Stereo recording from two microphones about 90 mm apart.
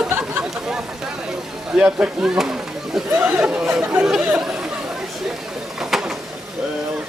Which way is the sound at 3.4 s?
10° right (ahead or behind).